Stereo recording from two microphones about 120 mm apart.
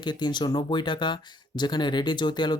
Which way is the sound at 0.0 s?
40° left (ahead or behind).